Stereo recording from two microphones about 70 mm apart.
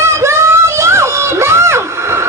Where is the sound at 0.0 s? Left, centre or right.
Right.